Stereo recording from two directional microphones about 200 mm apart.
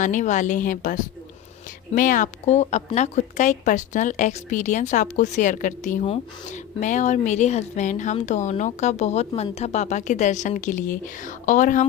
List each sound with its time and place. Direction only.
0.0 s speech: 40° left (ahead or behind)